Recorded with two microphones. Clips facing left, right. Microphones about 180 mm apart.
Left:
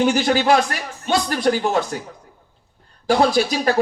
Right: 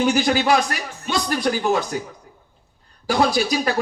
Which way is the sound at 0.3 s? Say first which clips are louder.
Left 2 dB; 40° left (ahead or behind).